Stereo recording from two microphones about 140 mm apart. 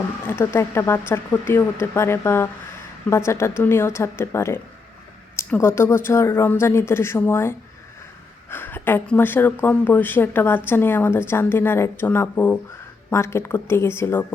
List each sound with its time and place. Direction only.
0.3 s a woman's voice: 15° left (ahead or behind)